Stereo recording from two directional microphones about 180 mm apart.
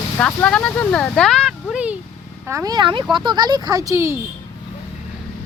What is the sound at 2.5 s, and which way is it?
Speech, 20° right (ahead or behind).